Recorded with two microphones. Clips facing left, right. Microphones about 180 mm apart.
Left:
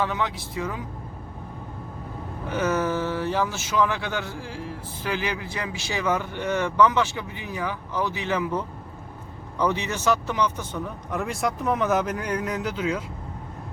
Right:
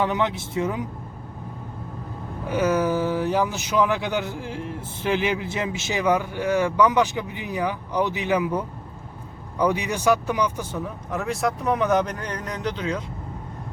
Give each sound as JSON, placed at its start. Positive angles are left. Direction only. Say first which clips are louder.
{"t": 0.0, "sound": "speech", "louder": "right 4 dB", "side_deg": -20}
{"t": 2.5, "sound": "speech", "louder": "right 3 dB", "side_deg": -10}